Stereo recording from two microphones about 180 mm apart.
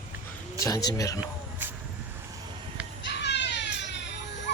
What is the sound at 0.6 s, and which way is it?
Speech, 20° left (ahead or behind).